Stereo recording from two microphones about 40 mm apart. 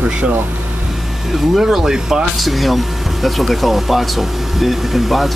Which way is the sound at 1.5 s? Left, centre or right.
Centre.